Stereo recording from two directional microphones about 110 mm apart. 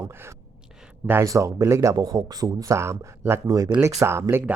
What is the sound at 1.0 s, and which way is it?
Speech, 25° right (ahead or behind).